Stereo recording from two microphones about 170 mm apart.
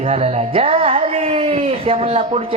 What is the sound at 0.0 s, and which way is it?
Speech, 35° right (ahead or behind).